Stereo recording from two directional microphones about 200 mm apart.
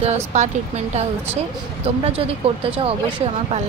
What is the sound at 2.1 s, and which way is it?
Speech, 30° right (ahead or behind).